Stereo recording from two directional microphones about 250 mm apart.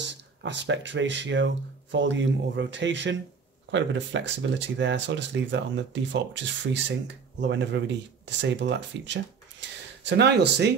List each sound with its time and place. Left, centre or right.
0.0 s speech: right
4.4 s speech: right